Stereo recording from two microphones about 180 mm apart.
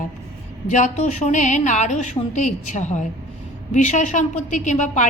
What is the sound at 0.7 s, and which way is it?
A woman's voice, 40° left (ahead or behind).